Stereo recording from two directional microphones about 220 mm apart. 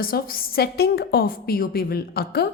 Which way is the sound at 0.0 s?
40° left (ahead or behind).